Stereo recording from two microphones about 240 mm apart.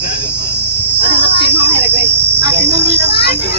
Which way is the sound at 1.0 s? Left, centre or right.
Right.